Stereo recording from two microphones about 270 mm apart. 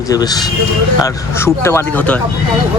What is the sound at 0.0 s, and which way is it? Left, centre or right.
Speech, centre.